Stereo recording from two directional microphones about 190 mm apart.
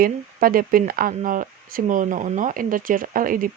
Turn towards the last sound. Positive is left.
turn(degrees=-45)  # may be behind; listen again after turning